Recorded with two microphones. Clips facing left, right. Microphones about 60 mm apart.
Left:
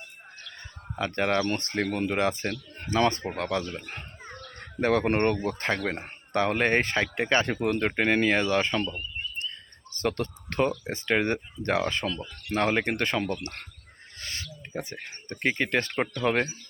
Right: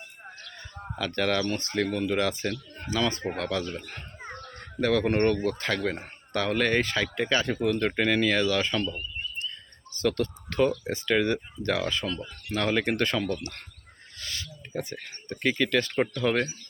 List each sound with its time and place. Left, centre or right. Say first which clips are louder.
0.9 s speech: left 1 dB; left
1.5 s speech: even; left
2.0 s speech: even; left
2.5 s speech: left 1 dB; left
3.3 s speech: left 1 dB; left
4.2 s a sound: right 3 dB; centre
4.8 s speech: even; left
7.8 s speech: even; left
10.0 s speech: right 2 dB; left
12.6 s speech: right 1 dB; left
14.2 s owl: even; left
14.7 s speech: right 2 dB; left